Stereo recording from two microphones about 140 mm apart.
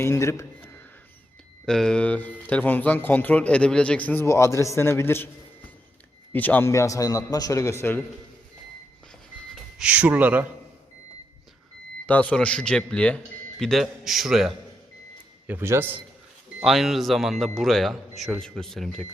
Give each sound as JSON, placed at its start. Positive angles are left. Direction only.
{"t": 0.0, "sound": "speech", "side_deg": 20}
{"t": 1.6, "sound": "a man's voice", "side_deg": 5}
{"t": 6.3, "sound": "a man's voice", "side_deg": 10}
{"t": 9.7, "sound": "speech", "side_deg": -10}
{"t": 12.0, "sound": "a man's voice", "side_deg": 10}
{"t": 15.4, "sound": "speech", "side_deg": -15}
{"t": 16.6, "sound": "speech", "side_deg": 0}